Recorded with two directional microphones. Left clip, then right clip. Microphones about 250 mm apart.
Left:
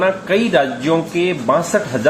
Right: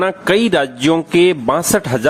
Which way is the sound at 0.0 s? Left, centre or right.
Right.